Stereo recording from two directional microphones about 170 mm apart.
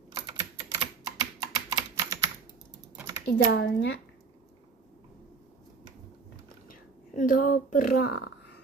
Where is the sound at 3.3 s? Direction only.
90° left.